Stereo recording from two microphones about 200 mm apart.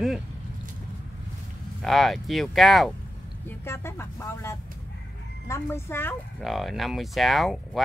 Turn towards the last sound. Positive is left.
turn(degrees=0)  # may be behind; listen again after turning